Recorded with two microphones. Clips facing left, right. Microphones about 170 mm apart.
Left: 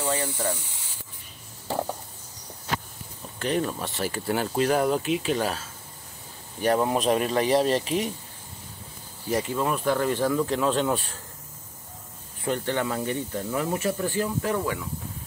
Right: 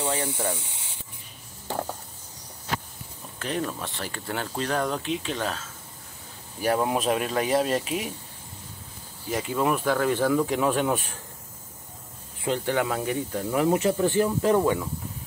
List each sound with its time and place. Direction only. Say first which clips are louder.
0.0 s speech: even; 20° right (ahead or behind)
3.3 s speech: left 3 dB; centre (ahead or behind)
6.6 s speech: left 1 dB; 5° right (ahead or behind)
9.3 s speech: right 1 dB; 5° right (ahead or behind)
12.4 s speech: right 1 dB; 15° right (ahead or behind)
13.5 s speech: right 5 dB; 20° right (ahead or behind)